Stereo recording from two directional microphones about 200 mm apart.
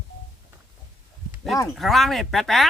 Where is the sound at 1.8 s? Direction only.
Centre (ahead or behind).